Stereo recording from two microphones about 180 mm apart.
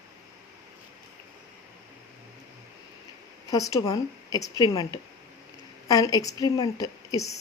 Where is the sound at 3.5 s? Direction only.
20° left (ahead or behind).